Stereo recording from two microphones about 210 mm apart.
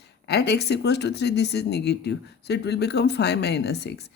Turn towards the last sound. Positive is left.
turn(degrees=50)  # may be behind; listen again after turning